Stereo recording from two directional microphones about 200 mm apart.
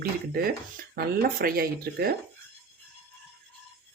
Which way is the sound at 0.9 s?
45° right (ahead or behind).